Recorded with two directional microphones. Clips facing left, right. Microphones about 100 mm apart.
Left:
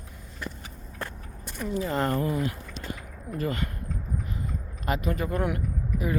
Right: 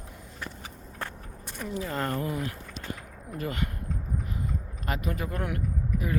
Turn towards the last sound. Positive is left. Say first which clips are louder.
# left 1 dB
turn(degrees=10)  # may be behind; listen again after turning